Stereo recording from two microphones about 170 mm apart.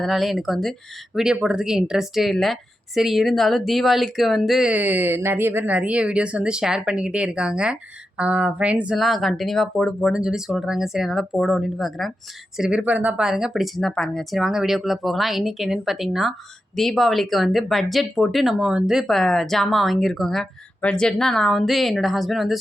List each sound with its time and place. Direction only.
0.0 s a woman's voice: centre (ahead or behind)